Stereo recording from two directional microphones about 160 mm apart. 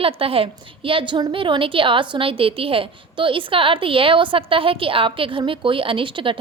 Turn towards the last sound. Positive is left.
turn(degrees=-30)  # may be behind; listen again after turning